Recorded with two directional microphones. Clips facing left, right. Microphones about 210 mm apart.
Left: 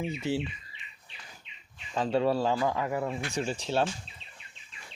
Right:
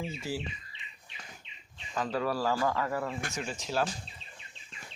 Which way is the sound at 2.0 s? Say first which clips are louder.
Left 5 dB; 25° left (ahead or behind).